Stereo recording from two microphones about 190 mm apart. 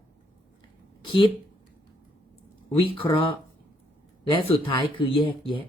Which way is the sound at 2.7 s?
30° left (ahead or behind).